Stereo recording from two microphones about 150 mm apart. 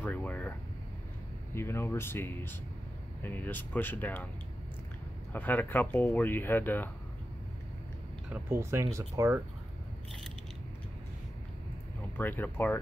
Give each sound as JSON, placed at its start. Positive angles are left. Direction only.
{"t": 0.0, "sound": "a sound", "side_deg": 10}
{"t": 1.5, "sound": "speech", "side_deg": 15}
{"t": 5.3, "sound": "speech", "side_deg": 10}
{"t": 8.3, "sound": "speech", "side_deg": -15}
{"t": 12.2, "sound": "speech", "side_deg": 10}